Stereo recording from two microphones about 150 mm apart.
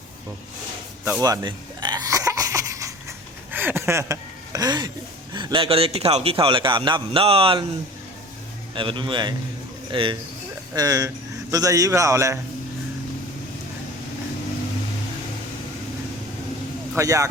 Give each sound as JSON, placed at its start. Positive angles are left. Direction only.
{"t": 1.2, "sound": "cough", "side_deg": -25}
{"t": 5.3, "sound": "a man's voice", "side_deg": -30}
{"t": 8.7, "sound": "a man's voice", "side_deg": -35}
{"t": 10.8, "sound": "a man's voice", "side_deg": -25}
{"t": 16.9, "sound": "a man's voice", "side_deg": -20}